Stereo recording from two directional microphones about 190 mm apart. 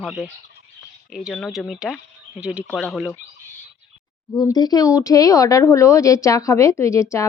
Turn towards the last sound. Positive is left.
turn(degrees=15)  # may be behind; listen again after turning